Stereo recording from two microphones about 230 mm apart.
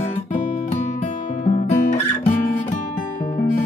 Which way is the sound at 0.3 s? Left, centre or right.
Left.